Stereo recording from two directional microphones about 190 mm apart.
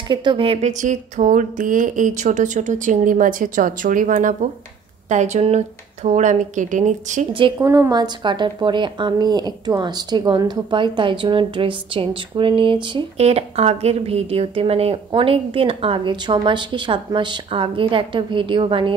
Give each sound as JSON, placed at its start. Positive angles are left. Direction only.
{"t": 0.1, "sound": "speech", "side_deg": -25}
{"t": 7.5, "sound": "a woman's voice", "side_deg": -15}